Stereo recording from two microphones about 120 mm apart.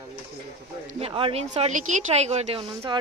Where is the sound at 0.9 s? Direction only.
50° right (ahead or behind).